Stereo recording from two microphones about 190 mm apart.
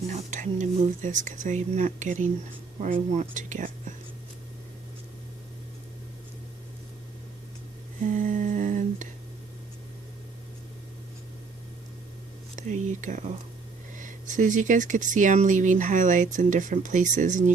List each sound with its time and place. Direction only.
0.1 s speech: 40° right (ahead or behind)
8.0 s humming: 45° right (ahead or behind)
12.5 s speech: 40° right (ahead or behind)